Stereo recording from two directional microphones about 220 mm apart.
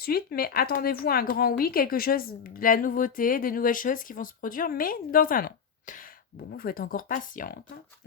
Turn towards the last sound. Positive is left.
turn(degrees=40)  # may be behind; listen again after turning